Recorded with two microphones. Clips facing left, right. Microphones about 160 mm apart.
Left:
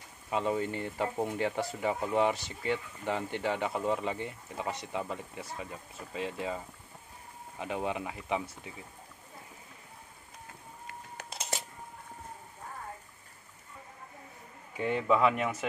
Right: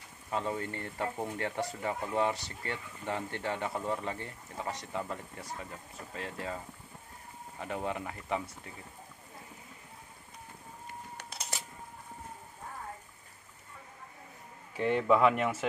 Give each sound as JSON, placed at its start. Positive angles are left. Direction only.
{"t": 0.3, "sound": "speech", "side_deg": 20}
{"t": 1.5, "sound": "speech", "side_deg": 5}
{"t": 14.8, "sound": "speech", "side_deg": 5}